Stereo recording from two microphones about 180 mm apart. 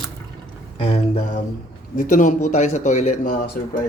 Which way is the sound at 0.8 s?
35° left (ahead or behind).